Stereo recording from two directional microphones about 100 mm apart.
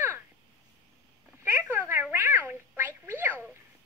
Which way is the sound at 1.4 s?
20° right (ahead or behind).